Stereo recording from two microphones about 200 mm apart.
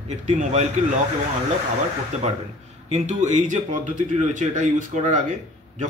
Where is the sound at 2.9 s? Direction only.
35° right (ahead or behind).